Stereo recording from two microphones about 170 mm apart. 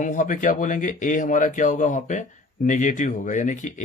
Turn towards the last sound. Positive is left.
turn(degrees=45)  # may be behind; listen again after turning